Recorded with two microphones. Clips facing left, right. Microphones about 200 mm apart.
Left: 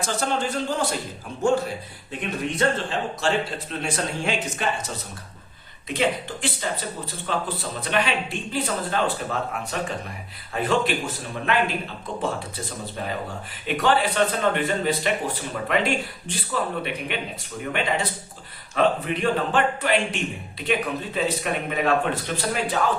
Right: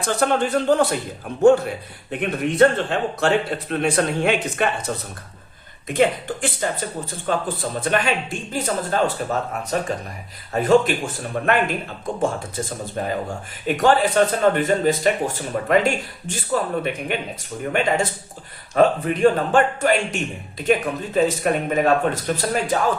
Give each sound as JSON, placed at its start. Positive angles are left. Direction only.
{"t": 0.0, "sound": "a man's voice", "side_deg": -60}
{"t": 2.6, "sound": "a man's voice", "side_deg": -60}
{"t": 5.9, "sound": "speech", "side_deg": -50}